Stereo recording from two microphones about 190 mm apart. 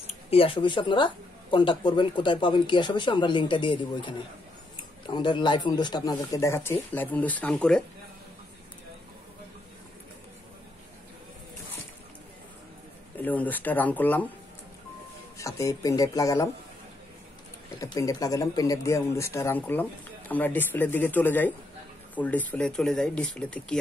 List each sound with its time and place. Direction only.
0.0 s speech: 30° left (ahead or behind); by 7.8 s 5° left (ahead or behind)
13.2 s speech: 10° left (ahead or behind)
15.3 s speech: 15° left (ahead or behind)
17.7 s speech: 20° left (ahead or behind)